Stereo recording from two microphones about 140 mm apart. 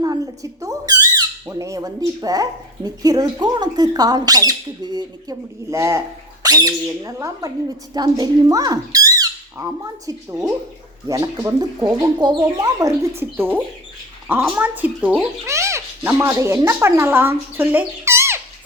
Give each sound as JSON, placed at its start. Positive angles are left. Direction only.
{"t": 0.0, "sound": "speech", "side_deg": -25}